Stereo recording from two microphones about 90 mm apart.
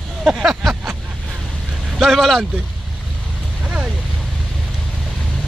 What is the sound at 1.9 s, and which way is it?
Speech, centre (ahead or behind).